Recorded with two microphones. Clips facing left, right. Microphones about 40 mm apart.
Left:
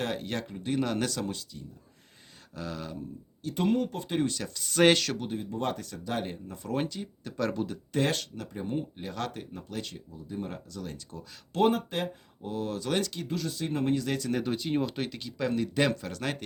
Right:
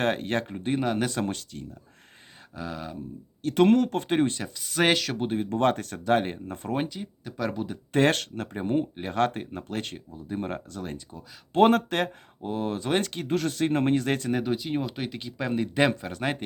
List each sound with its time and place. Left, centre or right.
0.0 s speech: right
0.8 s speech: centre
1.1 s speech: right
2.6 s speech: centre
3.4 s speech: right
4.4 s speech: centre
5.1 s speech: right
5.4 s speech: right
6.7 s speech: centre
7.9 s speech: right
11.7 s speech: right
12.4 s speech: right
14.3 s speech: centre
15.1 s speech: right